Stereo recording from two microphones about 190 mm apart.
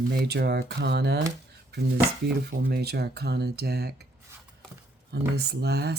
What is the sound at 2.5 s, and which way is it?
Speech, 60° right (ahead or behind).